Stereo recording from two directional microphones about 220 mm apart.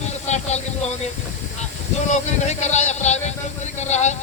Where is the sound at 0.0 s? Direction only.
30° left (ahead or behind).